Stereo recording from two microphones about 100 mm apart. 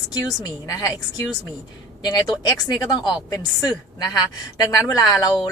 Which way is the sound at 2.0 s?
40° left (ahead or behind).